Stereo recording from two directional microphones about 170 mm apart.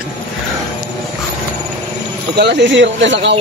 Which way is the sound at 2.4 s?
90° right.